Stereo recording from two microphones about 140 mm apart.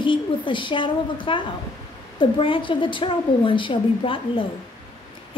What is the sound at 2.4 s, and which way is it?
A woman's voice, 35° left (ahead or behind).